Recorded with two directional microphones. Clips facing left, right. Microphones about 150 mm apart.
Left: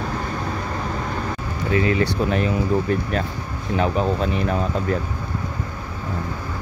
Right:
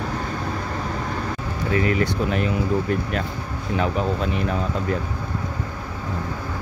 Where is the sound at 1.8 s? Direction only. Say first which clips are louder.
Left 2 dB; 25° left (ahead or behind).